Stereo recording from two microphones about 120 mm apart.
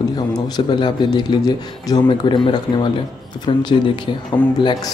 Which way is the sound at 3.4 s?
35° left (ahead or behind).